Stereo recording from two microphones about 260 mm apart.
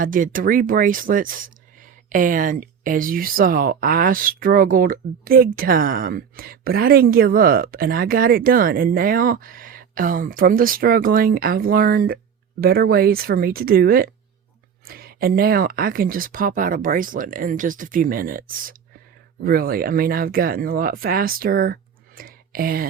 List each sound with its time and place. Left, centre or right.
0.0 s speech: right